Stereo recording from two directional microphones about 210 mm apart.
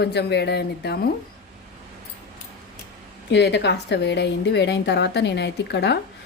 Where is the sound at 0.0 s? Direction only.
50° left (ahead or behind).